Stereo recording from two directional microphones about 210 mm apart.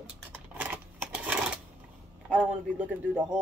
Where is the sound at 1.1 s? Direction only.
5° right (ahead or behind).